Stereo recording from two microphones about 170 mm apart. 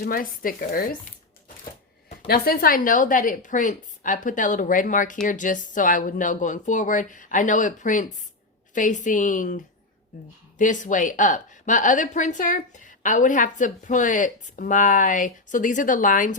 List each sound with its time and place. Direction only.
0.0 s speech: 55° left (ahead or behind)
2.2 s speech: 65° left (ahead or behind)
10.6 s speech: 45° left (ahead or behind)